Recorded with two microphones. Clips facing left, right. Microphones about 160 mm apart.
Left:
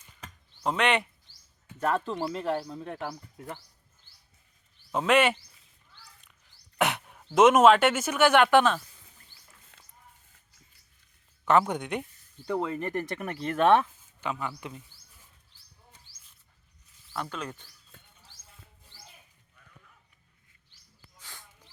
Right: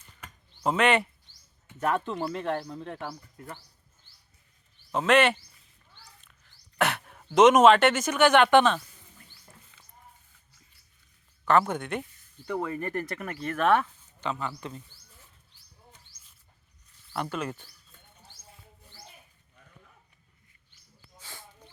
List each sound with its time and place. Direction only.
0.6 s speech: centre (ahead or behind); by 3.6 s 15° left (ahead or behind)
4.9 s speech: 5° left (ahead or behind)
6.7 s a sound: 20° left (ahead or behind)
7.1 s speech: 5° left (ahead or behind)
11.7 s speech: 15° left (ahead or behind)
14.2 s speech: 10° left (ahead or behind)
17.2 s speech: 10° right (ahead or behind)
21.2 s a sound: 10° right (ahead or behind)